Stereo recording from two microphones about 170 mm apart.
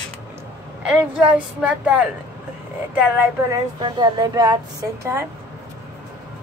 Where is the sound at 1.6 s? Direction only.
5° right (ahead or behind).